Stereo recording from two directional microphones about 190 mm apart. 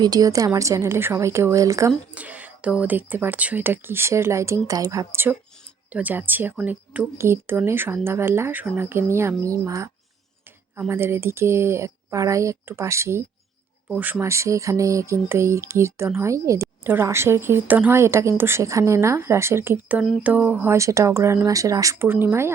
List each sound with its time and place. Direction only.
0.0 s speech: 20° right (ahead or behind)
1.9 s speech: 5° right (ahead or behind)